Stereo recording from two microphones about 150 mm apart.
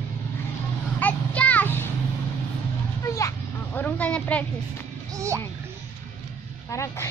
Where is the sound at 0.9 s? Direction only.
10° left (ahead or behind).